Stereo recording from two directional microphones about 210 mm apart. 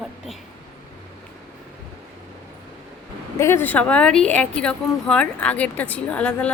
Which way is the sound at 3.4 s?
10° left (ahead or behind).